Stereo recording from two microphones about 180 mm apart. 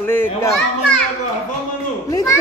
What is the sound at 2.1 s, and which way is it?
Speech, 20° left (ahead or behind).